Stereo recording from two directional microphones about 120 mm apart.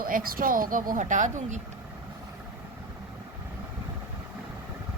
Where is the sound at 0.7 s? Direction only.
90° right.